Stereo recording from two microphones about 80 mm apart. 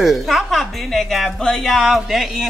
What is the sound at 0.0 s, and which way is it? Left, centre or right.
A woman's voice, centre.